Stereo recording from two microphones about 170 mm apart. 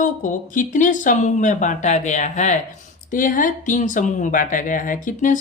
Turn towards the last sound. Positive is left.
turn(degrees=50)  # may be behind; listen again after turning